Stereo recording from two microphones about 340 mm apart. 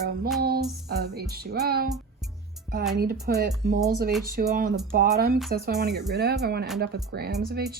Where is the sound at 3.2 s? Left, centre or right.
Right.